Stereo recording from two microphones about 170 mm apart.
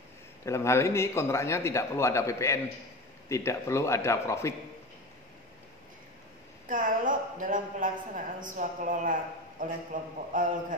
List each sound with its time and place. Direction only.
0.5 s a man's voice: 15° left (ahead or behind)
6.7 s a woman's voice: 50° right (ahead or behind)